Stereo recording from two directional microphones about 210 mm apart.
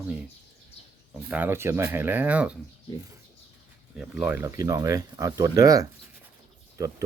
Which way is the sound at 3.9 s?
5° right (ahead or behind).